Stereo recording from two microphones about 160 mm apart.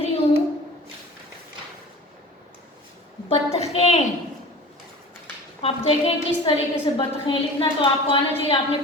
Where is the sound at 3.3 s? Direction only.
40° left (ahead or behind).